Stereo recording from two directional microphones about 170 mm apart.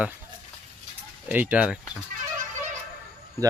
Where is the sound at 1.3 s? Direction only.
10° right (ahead or behind).